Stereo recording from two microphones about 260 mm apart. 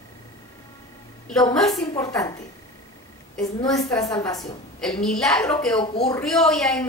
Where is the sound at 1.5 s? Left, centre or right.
Centre.